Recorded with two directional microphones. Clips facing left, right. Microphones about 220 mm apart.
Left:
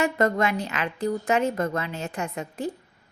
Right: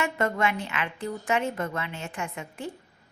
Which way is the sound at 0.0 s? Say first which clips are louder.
Left 4 dB; 35° left (ahead or behind).